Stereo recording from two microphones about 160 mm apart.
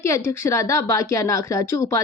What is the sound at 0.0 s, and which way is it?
A woman's voice, 20° left (ahead or behind).